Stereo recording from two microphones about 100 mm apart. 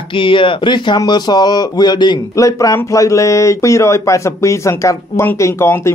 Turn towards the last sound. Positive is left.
turn(degrees=25)  # may be behind; listen again after turning